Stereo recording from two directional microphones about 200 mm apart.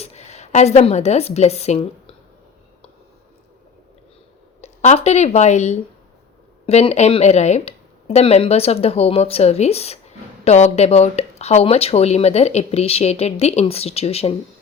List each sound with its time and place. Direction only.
0.0 s a woman's voice: 35° left (ahead or behind)
4.6 s speech: 35° left (ahead or behind)